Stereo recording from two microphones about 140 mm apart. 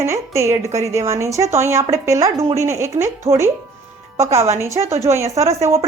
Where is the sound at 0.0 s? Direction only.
20° right (ahead or behind).